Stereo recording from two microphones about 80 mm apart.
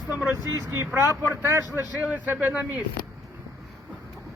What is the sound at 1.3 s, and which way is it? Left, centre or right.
Speech, right.